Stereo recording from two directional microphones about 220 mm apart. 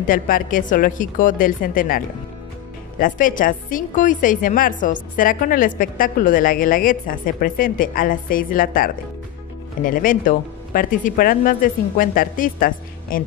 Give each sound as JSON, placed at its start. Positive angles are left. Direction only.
{"t": 0.0, "sound": "a woman's voice", "side_deg": 40}